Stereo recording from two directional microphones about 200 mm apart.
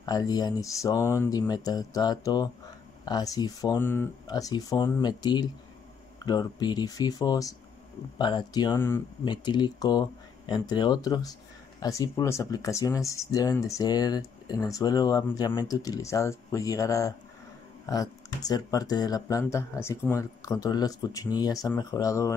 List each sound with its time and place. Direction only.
0.0 s speech: 20° left (ahead or behind)